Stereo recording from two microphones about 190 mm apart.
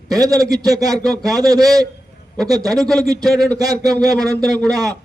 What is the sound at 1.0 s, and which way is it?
Speech, centre (ahead or behind).